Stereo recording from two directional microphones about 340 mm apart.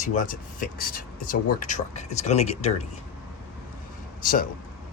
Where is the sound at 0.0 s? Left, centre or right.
Left.